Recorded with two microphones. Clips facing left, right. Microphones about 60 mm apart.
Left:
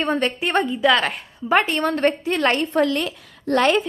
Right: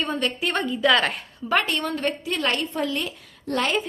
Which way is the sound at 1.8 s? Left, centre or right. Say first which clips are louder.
Left 6 dB; left.